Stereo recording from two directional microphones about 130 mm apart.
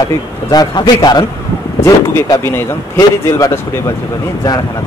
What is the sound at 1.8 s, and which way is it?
Speech, 20° left (ahead or behind).